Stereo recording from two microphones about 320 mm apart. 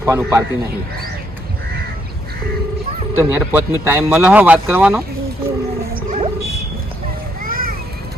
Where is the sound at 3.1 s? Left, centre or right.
Centre.